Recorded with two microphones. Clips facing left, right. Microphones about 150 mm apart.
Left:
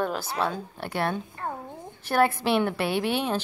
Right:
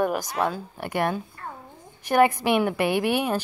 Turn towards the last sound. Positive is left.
turn(degrees=-10)  # may be behind; listen again after turning